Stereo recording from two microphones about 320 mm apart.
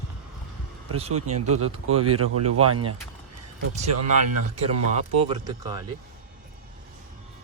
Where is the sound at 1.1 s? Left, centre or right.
Right.